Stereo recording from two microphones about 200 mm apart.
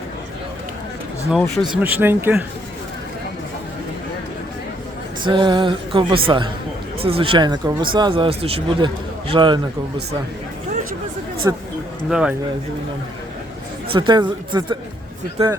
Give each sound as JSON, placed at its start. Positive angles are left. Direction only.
{"t": 1.3, "sound": "speech", "side_deg": 0}
{"t": 1.7, "sound": "speech", "side_deg": -10}
{"t": 5.2, "sound": "speech", "side_deg": -20}
{"t": 11.4, "sound": "speech", "side_deg": -15}
{"t": 13.9, "sound": "speech", "side_deg": -25}